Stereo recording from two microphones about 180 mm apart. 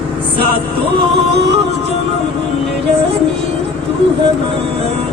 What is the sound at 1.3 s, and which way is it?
Music, 70° right (ahead or behind).